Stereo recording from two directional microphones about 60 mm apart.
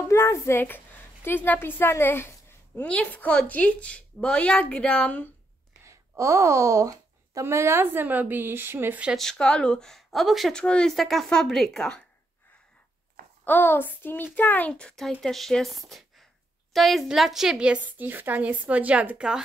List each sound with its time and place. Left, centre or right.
0.1 s a woman's voice: left
0.7 s a woman's voice: left
2.8 s a woman's voice: centre
5.9 s a sound: right
7.4 s a woman's voice: right
9.1 s speech: centre
10.5 s speech: centre
10.9 s speech: centre
13.5 s a child's voice: left
14.7 s speech: centre
15.2 s a woman's voice: centre
17.8 s a woman's voice: right; by 19.4 s centre